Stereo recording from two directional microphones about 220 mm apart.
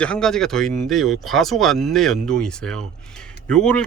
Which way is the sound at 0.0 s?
5° left (ahead or behind).